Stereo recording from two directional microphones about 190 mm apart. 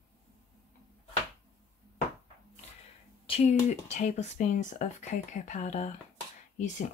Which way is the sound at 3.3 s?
35° left (ahead or behind).